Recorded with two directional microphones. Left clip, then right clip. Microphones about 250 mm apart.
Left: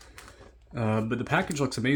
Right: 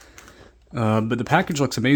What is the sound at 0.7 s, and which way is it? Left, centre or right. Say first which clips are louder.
Speech: right 7 dB; right.